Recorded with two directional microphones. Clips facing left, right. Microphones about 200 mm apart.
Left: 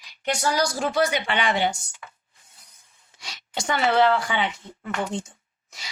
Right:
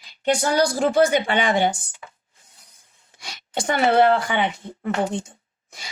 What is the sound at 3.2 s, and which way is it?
Speech, 55° right (ahead or behind).